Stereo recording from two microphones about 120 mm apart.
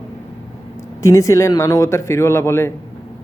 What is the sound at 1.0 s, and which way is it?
Speech, 25° left (ahead or behind).